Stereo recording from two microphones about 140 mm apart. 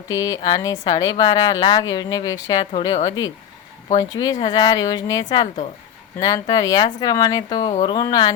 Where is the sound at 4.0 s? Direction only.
25° left (ahead or behind).